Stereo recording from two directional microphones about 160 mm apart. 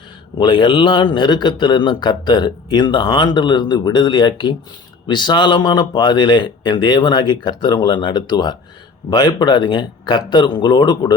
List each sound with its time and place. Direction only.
0.3 s a man's voice: 30° left (ahead or behind)